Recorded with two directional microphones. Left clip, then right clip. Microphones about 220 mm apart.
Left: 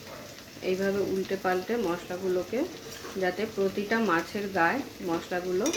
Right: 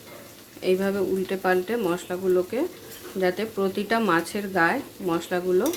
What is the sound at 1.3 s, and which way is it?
Stir, 50° right (ahead or behind).